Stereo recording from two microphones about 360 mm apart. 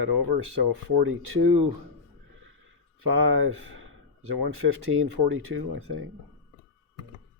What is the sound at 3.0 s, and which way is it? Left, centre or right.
Speech, right.